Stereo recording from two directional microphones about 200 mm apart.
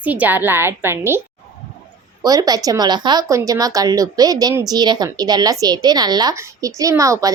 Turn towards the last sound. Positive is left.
turn(degrees=-15)  # may be behind; listen again after turning